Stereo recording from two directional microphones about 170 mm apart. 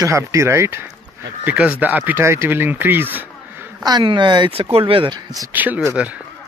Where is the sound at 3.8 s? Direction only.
25° right (ahead or behind).